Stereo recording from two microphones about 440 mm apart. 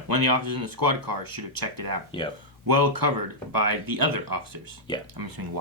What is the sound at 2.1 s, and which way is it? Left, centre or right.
Speech, centre.